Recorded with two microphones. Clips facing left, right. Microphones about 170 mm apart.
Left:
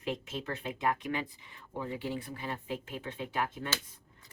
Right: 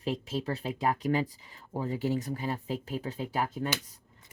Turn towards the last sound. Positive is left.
turn(degrees=-40)  # may be behind; listen again after turning